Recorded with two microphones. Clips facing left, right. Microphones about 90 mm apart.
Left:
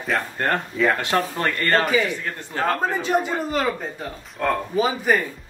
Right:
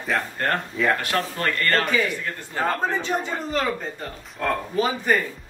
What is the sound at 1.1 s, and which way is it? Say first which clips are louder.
Speech: left 2 dB; 25° left (ahead or behind).